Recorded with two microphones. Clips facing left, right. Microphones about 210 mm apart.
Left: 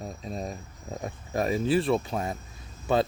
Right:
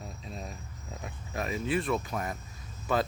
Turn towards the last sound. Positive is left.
turn(degrees=25)  # may be behind; listen again after turning